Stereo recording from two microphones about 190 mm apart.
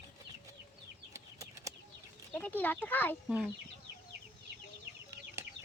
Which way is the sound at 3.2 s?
5° right (ahead or behind).